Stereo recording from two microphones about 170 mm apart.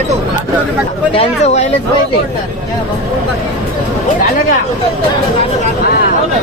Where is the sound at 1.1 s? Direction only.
35° left (ahead or behind).